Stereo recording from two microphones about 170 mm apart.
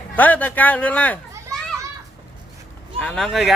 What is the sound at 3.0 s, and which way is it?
Speech, 5° left (ahead or behind).